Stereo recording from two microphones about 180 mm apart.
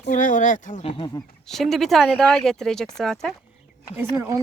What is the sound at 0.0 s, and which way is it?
Speech, 45° left (ahead or behind).